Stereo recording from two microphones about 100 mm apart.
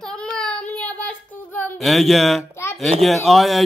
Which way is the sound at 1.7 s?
Centre (ahead or behind).